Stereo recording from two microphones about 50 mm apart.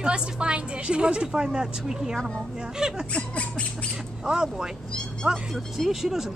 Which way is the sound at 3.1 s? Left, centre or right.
Left.